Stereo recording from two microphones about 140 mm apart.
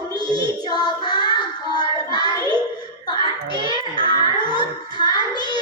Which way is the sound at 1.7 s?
30° left (ahead or behind).